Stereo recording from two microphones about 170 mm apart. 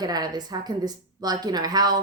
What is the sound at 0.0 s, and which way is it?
A woman's voice, 25° right (ahead or behind).